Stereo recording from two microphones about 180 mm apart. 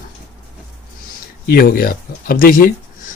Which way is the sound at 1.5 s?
55° left (ahead or behind).